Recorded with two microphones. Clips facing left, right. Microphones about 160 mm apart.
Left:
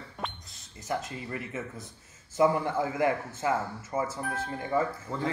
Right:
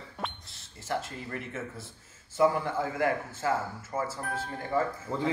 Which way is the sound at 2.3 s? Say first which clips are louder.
Left 1 dB; 20° left (ahead or behind).